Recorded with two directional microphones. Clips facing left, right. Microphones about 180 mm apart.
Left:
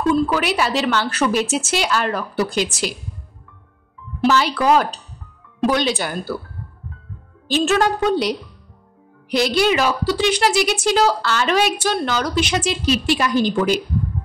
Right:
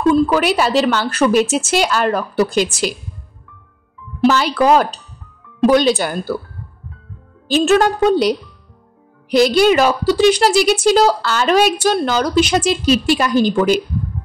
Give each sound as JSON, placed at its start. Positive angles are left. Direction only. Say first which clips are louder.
{"t": 0.3, "sound": "a woman's voice", "louder": "right 5 dB", "side_deg": -40}
{"t": 4.3, "sound": "a woman's voice", "louder": "right 3 dB", "side_deg": -50}
{"t": 7.5, "sound": "a woman's voice", "louder": "right 4 dB", "side_deg": -45}